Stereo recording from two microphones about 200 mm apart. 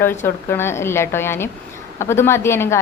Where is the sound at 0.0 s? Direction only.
10° left (ahead or behind).